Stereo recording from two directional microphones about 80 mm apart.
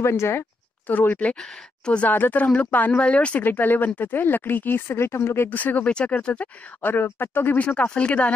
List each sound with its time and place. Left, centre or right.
0.0 s speech: left; by 8.3 s centre